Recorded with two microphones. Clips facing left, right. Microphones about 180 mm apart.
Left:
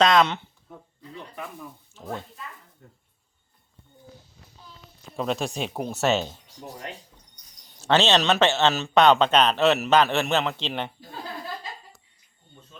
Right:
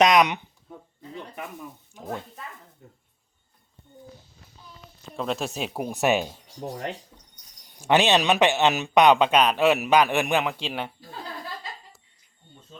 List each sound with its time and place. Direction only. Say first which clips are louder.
0.0 s speech: right 1 dB; 15° right (ahead or behind)
1.9 s speech: right 1 dB; 15° right (ahead or behind)
2.8 s a sound: right 2 dB; 15° right (ahead or behind)
5.1 s speech: left 1 dB; centre (ahead or behind)
6.6 s speech: right 6 dB; 40° right (ahead or behind)
7.8 s speech: right 1 dB; 15° right (ahead or behind)